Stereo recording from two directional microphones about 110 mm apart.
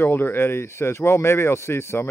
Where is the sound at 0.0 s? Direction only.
20° left (ahead or behind).